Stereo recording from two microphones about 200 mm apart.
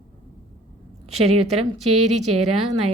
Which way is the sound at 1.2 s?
30° right (ahead or behind).